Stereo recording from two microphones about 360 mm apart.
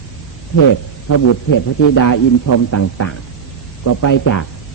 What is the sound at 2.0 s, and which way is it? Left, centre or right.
Speech, left.